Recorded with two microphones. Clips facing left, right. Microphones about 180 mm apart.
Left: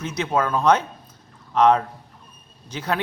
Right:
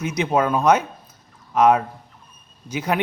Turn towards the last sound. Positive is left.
turn(degrees=-10)  # may be behind; listen again after turning